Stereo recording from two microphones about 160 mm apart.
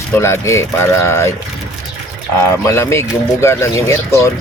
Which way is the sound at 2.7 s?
15° left (ahead or behind).